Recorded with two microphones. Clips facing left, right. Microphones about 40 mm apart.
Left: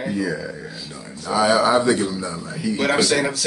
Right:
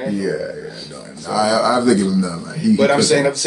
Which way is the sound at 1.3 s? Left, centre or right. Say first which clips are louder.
Right 1 dB; left.